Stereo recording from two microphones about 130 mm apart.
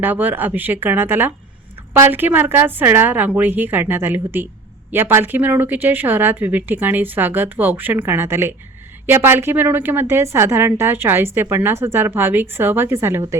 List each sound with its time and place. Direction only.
0.0 s a woman's voice: 15° right (ahead or behind)